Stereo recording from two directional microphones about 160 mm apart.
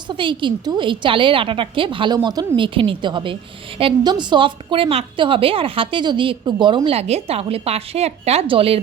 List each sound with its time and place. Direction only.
0.1 s a woman's voice: 30° right (ahead or behind)